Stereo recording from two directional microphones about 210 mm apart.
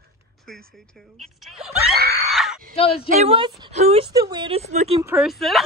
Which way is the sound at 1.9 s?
45° right (ahead or behind).